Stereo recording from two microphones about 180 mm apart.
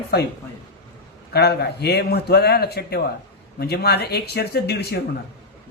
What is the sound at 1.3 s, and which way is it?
Speech, 65° left (ahead or behind).